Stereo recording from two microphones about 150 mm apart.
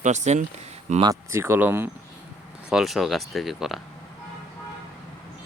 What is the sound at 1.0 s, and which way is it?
Speech, 15° right (ahead or behind).